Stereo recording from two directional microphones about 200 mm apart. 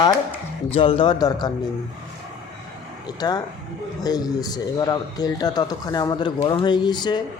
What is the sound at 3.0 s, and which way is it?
A man's voice, 20° left (ahead or behind).